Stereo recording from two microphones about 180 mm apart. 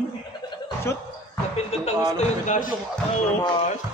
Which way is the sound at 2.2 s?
45° left (ahead or behind).